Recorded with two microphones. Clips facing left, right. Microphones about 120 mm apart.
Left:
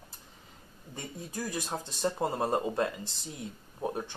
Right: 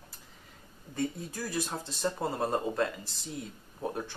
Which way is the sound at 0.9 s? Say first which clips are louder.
Right 5 dB; 15° left (ahead or behind).